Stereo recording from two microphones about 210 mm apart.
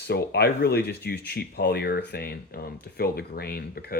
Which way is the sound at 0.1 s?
50° left (ahead or behind).